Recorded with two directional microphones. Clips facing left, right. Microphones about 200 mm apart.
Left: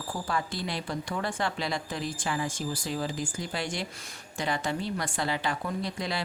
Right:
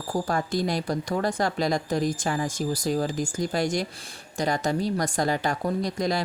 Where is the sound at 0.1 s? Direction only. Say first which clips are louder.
Right 7 dB; 45° right (ahead or behind).